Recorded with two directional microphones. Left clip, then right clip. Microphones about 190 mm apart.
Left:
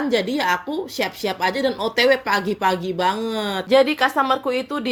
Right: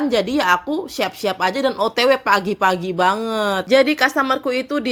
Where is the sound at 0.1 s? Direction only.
50° right (ahead or behind).